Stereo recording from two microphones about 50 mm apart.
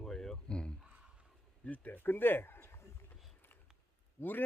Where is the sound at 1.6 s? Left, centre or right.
Left.